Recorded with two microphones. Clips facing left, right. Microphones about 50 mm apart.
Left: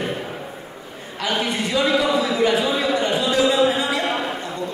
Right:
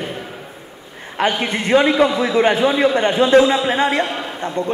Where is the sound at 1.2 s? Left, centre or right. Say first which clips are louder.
Right 4 dB; right.